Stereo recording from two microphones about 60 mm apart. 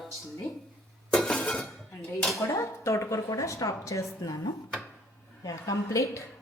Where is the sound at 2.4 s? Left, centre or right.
Left.